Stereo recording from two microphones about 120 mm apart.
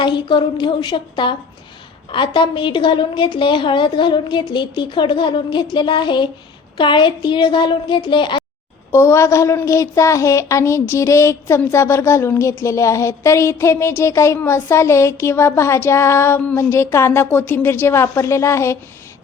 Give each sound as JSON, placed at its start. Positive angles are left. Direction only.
{"t": 0.0, "sound": "a woman's voice", "side_deg": 40}
{"t": 8.9, "sound": "a woman's voice", "side_deg": 25}